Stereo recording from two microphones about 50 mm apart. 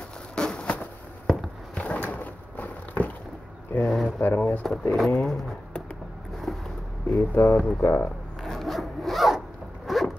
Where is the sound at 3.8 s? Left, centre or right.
Centre.